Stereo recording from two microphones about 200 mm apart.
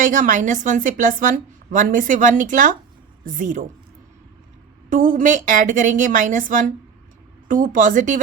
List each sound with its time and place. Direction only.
0.0 s a woman's voice: 40° right (ahead or behind)
4.9 s a woman's voice: 40° right (ahead or behind)